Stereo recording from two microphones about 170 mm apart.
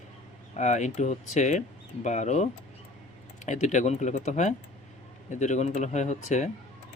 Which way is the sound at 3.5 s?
45° left (ahead or behind).